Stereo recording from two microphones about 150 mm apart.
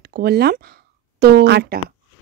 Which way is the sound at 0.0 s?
90° right.